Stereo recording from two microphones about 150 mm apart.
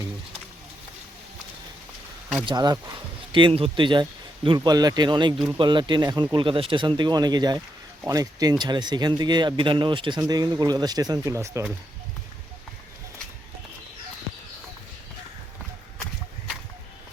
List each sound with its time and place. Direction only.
2.5 s speech: 30° right (ahead or behind)